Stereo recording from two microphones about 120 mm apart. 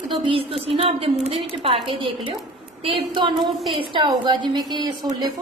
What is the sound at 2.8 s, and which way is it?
A woman's voice, 45° right (ahead or behind).